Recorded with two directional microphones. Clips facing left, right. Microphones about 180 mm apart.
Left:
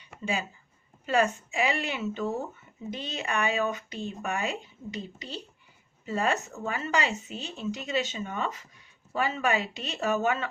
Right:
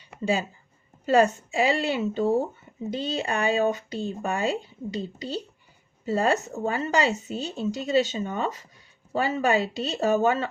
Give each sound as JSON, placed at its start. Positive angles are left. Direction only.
{"t": 0.2, "sound": "speech", "side_deg": -35}